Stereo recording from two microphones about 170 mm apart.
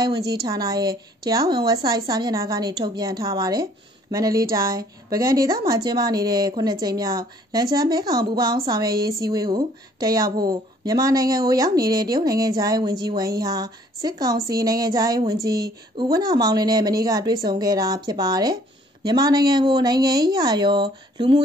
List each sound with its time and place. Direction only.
0.0 s speech: 20° right (ahead or behind)